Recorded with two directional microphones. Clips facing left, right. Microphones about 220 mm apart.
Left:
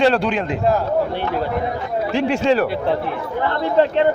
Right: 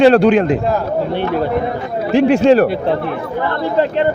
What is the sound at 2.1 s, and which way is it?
Speech, 55° right (ahead or behind).